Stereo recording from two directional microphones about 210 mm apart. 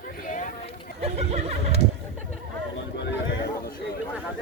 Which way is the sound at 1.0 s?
30° right (ahead or behind).